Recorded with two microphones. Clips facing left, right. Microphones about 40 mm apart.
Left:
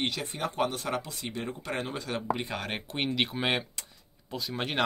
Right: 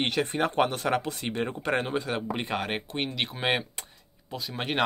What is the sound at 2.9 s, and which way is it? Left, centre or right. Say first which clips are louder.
Speech: left 1 dB; centre.